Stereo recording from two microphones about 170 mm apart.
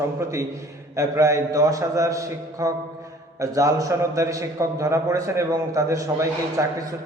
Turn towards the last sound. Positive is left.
turn(degrees=-20)  # may be behind; listen again after turning